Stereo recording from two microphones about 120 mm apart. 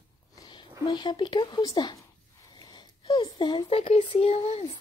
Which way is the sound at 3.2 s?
40° left (ahead or behind).